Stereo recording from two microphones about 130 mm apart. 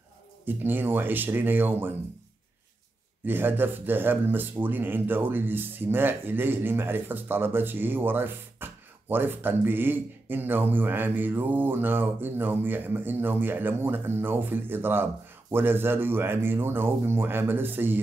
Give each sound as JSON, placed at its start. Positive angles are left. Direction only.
{"t": 0.5, "sound": "speech", "side_deg": -15}
{"t": 3.3, "sound": "speech", "side_deg": -15}